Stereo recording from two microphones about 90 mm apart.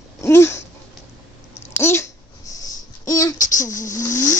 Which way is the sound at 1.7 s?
30° left (ahead or behind).